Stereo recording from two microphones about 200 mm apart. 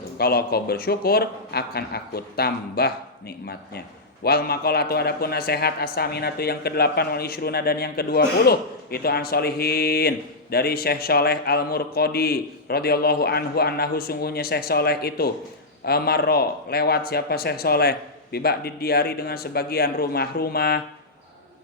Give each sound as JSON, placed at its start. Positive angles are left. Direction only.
{"t": 0.2, "sound": "a man's voice", "side_deg": 50}